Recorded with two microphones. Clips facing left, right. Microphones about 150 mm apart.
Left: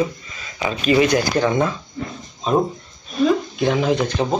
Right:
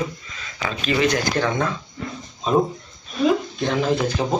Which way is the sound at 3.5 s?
5° left (ahead or behind).